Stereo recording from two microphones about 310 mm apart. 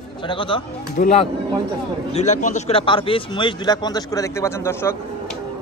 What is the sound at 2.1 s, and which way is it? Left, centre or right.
Speech, left.